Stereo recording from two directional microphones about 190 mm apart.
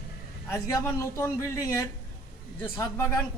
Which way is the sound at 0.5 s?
15° left (ahead or behind).